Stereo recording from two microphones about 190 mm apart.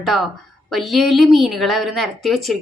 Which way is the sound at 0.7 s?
Centre (ahead or behind).